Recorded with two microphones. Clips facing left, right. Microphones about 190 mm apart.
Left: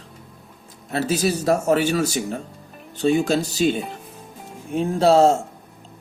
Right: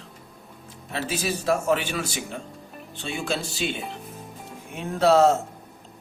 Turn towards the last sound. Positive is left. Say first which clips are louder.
# left 3 dB
turn(degrees=30)  # may be behind; listen again after turning